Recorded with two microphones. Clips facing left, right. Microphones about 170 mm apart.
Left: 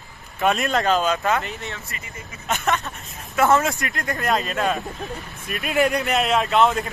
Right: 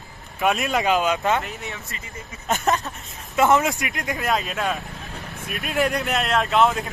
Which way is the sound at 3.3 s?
20° right (ahead or behind).